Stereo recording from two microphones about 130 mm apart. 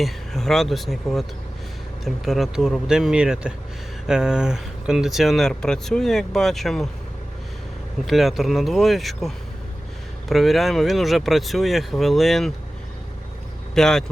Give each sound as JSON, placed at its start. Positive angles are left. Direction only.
{"t": 0.0, "sound": "speech", "side_deg": 5}
{"t": 8.0, "sound": "speech", "side_deg": 0}
{"t": 13.7, "sound": "speech", "side_deg": 5}